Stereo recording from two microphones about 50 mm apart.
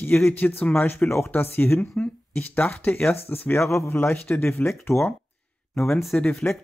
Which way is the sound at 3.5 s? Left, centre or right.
Left.